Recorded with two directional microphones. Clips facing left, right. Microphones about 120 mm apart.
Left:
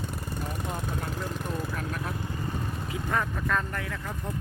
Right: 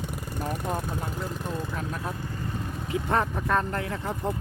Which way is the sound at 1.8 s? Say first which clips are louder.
Right 1 dB; 20° right (ahead or behind).